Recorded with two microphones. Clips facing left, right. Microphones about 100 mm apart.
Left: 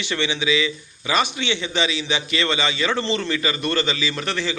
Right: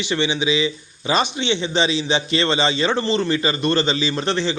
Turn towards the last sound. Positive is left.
turn(degrees=-25)  # may be behind; listen again after turning